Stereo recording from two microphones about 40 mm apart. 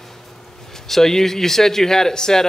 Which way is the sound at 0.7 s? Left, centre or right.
Centre.